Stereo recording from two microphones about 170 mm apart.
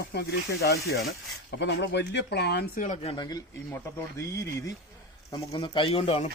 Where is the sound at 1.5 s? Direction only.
90° left; by 2.8 s 70° left (ahead or behind).